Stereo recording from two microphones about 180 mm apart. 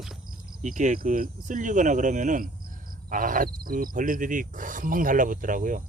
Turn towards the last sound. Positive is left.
turn(degrees=-45)  # may be behind; listen again after turning